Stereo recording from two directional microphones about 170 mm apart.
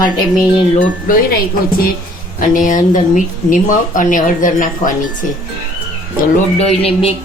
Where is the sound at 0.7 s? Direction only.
55° left (ahead or behind).